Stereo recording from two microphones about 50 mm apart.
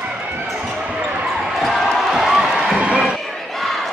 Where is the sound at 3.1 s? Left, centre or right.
Centre.